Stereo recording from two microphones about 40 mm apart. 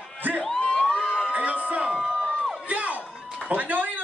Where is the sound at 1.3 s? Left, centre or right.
Right.